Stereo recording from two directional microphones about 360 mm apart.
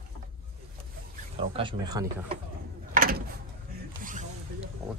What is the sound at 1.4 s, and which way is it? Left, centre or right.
Speech, centre.